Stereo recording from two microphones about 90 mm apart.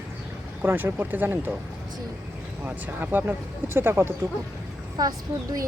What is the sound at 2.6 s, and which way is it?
Speech, 20° right (ahead or behind).